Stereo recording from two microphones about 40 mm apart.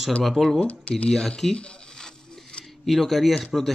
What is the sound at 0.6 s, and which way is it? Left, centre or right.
Speech, left.